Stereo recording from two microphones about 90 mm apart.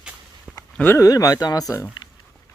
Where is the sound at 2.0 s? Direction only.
60° left (ahead or behind).